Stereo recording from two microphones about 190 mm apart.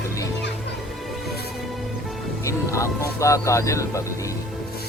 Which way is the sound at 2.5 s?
15° left (ahead or behind).